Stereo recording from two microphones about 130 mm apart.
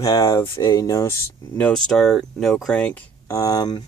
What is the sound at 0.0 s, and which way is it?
Speech, 25° left (ahead or behind).